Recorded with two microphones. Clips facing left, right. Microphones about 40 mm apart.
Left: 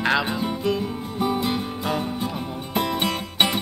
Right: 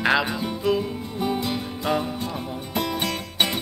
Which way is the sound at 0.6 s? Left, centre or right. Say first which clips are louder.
Right 5 dB; centre.